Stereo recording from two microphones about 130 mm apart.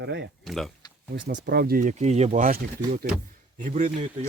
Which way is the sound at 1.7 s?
75° right (ahead or behind).